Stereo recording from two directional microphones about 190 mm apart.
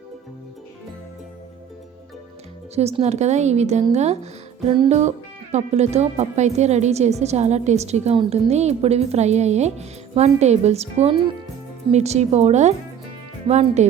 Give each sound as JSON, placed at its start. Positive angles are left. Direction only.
{"t": 2.7, "sound": "speech", "side_deg": -35}